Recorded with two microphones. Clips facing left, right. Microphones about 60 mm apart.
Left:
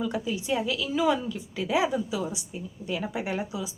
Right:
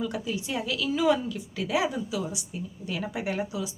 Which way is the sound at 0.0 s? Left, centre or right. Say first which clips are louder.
Left 1 dB; left.